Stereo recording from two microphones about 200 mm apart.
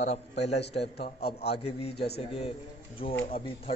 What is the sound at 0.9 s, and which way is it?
Speech, 55° left (ahead or behind).